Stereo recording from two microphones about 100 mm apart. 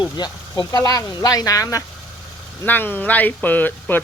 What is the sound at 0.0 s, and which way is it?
Speech, 45° left (ahead or behind).